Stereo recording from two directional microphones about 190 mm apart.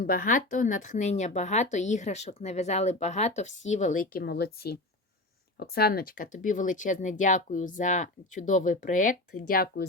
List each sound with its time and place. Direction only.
0.0 s a woman's voice: 50° left (ahead or behind)